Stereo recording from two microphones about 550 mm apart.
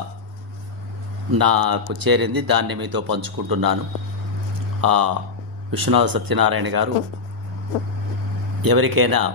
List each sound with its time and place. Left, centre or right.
1.3 s speech: right
4.8 s speech: right
8.6 s speech: right